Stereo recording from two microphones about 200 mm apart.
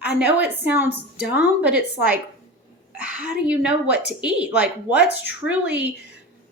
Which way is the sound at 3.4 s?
5° right (ahead or behind).